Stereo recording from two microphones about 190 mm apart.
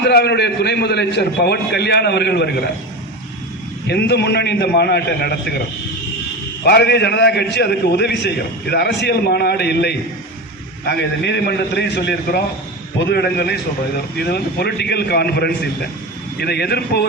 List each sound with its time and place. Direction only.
0.0 s a man's voice: 60° left (ahead or behind)
3.8 s a man's voice: 60° left (ahead or behind)
6.7 s a man's voice: 60° left (ahead or behind)